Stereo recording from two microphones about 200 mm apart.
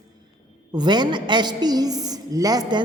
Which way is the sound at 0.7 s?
20° right (ahead or behind).